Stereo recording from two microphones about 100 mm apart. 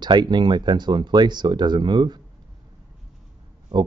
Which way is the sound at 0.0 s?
50° right (ahead or behind).